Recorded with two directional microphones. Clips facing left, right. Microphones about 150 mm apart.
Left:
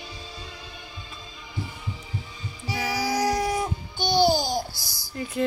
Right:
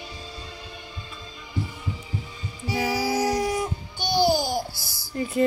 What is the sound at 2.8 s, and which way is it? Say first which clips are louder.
Music: right 2 dB; 10° right (ahead or behind).